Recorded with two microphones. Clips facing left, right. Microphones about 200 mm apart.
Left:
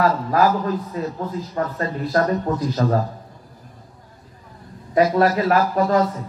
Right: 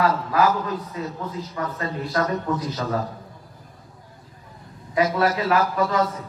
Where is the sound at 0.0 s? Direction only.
45° left (ahead or behind).